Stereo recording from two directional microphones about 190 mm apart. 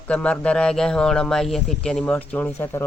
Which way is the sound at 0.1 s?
5° left (ahead or behind).